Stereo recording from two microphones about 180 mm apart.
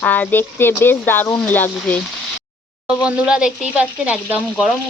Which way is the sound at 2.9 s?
5° right (ahead or behind).